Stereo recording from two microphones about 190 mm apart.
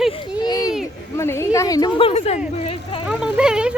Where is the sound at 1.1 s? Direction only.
15° left (ahead or behind); by 2.4 s 35° left (ahead or behind).